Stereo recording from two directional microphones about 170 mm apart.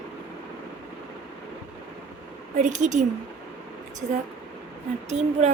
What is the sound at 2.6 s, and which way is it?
Speech, 45° right (ahead or behind).